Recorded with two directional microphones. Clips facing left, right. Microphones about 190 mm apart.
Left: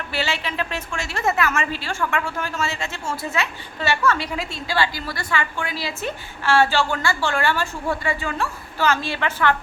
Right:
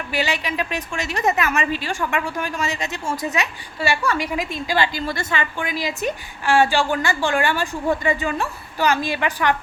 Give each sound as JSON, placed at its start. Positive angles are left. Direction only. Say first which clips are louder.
{"t": 0.1, "sound": "a woman's voice", "louder": "right 3 dB", "side_deg": -15}